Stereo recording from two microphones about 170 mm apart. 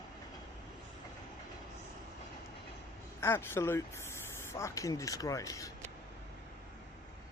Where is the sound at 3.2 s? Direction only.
15° left (ahead or behind).